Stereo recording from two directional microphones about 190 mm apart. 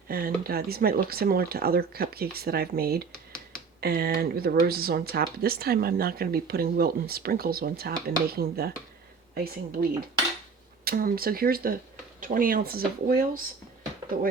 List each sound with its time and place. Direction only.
0.1 s speech: 50° right (ahead or behind)